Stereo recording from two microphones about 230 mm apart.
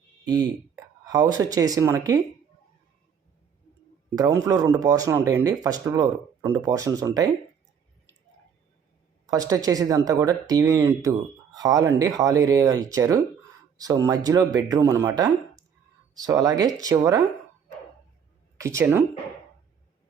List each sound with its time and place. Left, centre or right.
0.3 s speech: centre
4.1 s speech: centre
9.2 s speech: centre
18.5 s speech: centre